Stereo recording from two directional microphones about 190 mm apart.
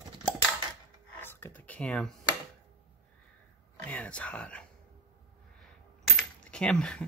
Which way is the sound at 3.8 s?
5° left (ahead or behind).